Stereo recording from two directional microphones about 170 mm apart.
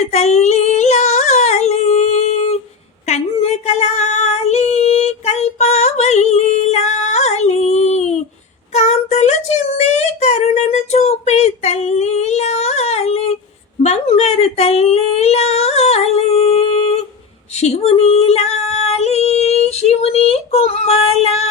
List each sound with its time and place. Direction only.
0.0 s singing: 40° left (ahead or behind)
3.1 s female singing: 40° left (ahead or behind)
8.7 s a sound: 40° left (ahead or behind)
17.6 s female singing: 40° left (ahead or behind)